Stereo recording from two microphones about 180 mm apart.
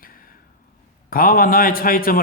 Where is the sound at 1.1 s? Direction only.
55° left (ahead or behind).